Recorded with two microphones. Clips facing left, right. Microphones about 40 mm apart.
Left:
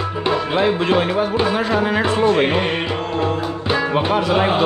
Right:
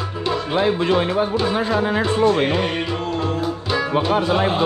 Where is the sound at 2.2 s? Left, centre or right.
Left.